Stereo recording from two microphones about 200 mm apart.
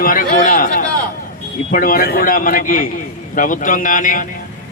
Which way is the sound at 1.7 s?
45° left (ahead or behind).